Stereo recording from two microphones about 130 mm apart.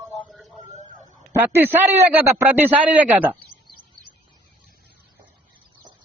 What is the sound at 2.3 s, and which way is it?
Speech, 15° right (ahead or behind).